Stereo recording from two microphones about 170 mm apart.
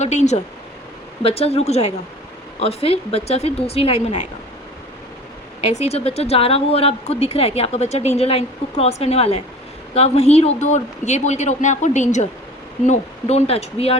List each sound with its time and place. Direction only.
0.0 s speech: 40° left (ahead or behind)
5.7 s speech: 40° left (ahead or behind)